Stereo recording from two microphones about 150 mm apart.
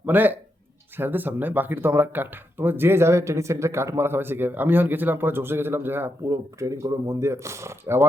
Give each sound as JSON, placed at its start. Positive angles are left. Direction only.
{"t": 0.0, "sound": "speech", "side_deg": -10}